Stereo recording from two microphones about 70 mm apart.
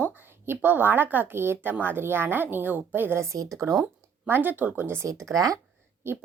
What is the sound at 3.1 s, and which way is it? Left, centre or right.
Speech, right.